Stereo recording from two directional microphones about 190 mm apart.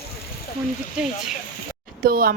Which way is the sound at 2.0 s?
50° right (ahead or behind).